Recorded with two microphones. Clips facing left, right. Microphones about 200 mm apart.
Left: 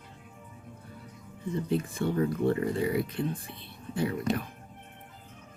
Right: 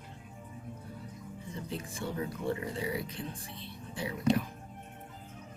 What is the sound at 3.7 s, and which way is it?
Whispering, 55° left (ahead or behind).